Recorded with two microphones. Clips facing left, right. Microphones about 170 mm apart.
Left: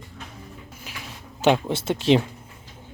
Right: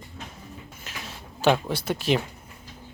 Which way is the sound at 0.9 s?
10° left (ahead or behind).